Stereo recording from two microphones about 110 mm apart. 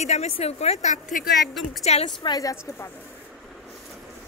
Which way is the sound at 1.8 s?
75° left (ahead or behind).